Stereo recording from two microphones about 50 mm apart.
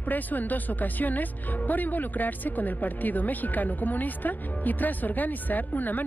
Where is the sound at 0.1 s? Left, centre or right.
Left.